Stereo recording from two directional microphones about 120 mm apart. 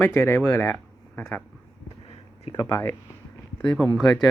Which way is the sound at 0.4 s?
15° left (ahead or behind).